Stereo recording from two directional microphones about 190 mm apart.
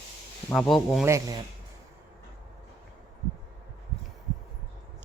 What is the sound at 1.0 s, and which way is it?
Speech, 15° right (ahead or behind).